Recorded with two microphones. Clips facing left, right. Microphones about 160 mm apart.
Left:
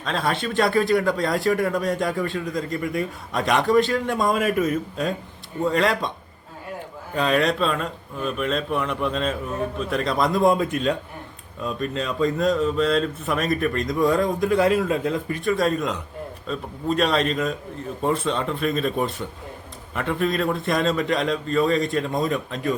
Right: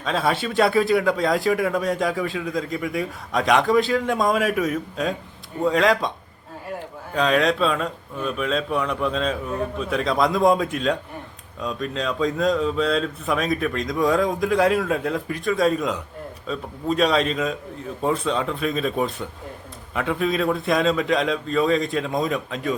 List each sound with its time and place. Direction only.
0.0 s speech: centre (ahead or behind)
7.1 s speech: centre (ahead or behind)